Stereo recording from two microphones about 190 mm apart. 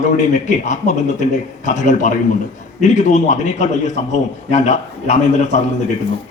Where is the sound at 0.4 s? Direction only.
40° left (ahead or behind).